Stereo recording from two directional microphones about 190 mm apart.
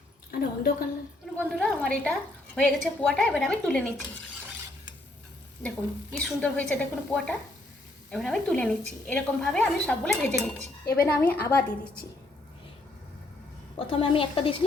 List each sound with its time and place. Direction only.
0.3 s a woman's voice: 55° left (ahead or behind)
1.4 s a woman's voice: 5° left (ahead or behind)
5.6 s a woman's voice: 5° left (ahead or behind)
13.7 s a woman's voice: 25° left (ahead or behind)